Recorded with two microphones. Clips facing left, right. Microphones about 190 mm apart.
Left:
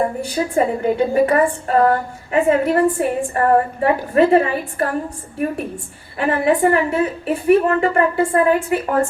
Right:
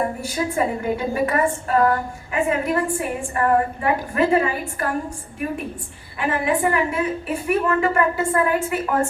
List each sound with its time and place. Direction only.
0.3 s a woman's voice: 30° left (ahead or behind)
6.1 s a woman's voice: 35° left (ahead or behind)